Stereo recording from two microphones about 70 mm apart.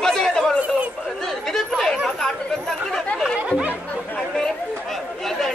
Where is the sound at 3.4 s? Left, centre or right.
Centre.